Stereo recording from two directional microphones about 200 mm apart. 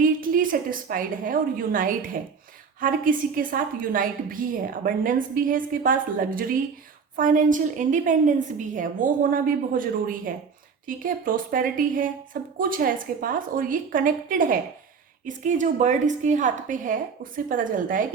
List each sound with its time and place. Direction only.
0.0 s a woman's voice: 45° right (ahead or behind)